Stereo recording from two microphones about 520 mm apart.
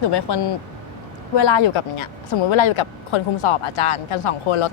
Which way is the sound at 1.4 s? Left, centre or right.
Left.